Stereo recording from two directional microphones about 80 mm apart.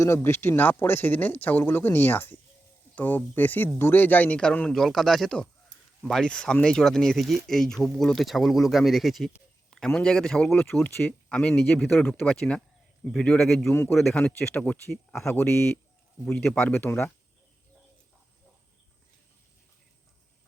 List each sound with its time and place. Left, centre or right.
0.0 s speech: left; by 13.7 s centre
13.7 s a man's voice: left
13.9 s speech: centre